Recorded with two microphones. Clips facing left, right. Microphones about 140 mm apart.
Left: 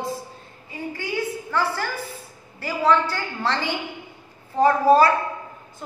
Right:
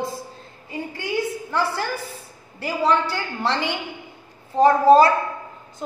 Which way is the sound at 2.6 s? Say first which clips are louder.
Even; 15° right (ahead or behind).